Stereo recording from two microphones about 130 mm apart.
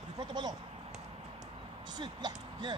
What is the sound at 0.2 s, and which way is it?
Speech, 30° right (ahead or behind).